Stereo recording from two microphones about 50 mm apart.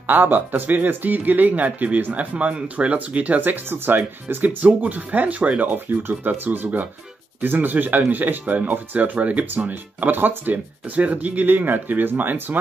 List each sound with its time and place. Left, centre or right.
0.0 s speech: right